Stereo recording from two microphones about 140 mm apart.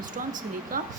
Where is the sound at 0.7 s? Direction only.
90° right.